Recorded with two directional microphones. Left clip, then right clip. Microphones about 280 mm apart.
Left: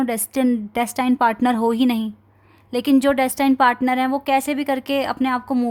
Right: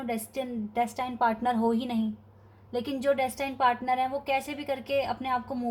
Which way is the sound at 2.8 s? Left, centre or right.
Left.